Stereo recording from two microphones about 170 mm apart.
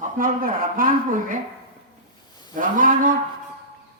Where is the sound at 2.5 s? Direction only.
50° right (ahead or behind).